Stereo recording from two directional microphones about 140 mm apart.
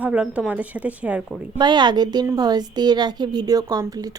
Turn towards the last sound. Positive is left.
turn(degrees=-25)  # may be behind; listen again after turning